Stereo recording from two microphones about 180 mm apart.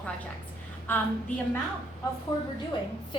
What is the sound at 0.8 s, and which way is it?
Speech, 10° left (ahead or behind).